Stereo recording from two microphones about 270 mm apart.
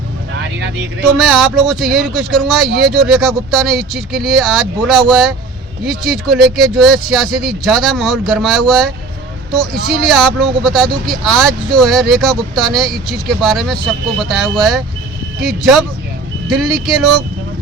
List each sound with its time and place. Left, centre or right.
0.3 s vehicle: right
1.1 s speech: centre